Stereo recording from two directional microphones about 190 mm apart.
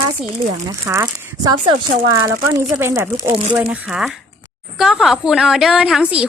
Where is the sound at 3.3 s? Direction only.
30° right (ahead or behind).